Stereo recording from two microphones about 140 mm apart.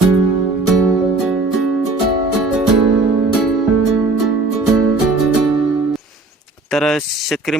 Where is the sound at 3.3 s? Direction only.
Centre (ahead or behind).